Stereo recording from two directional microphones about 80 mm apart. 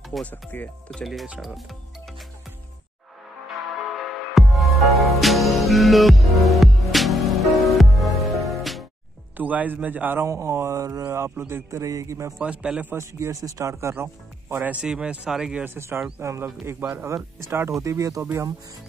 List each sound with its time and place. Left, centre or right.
0.2 s speech: left
1.4 s speech: centre
3.9 s music: centre
9.4 s a man's voice: right
10.2 s speech: right
12.4 s speech: centre
12.9 s speech: right
14.8 s speech: centre
15.6 s speech: right
18.2 s speech: right